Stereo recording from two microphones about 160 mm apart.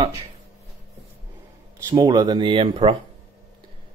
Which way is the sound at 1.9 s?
25° right (ahead or behind).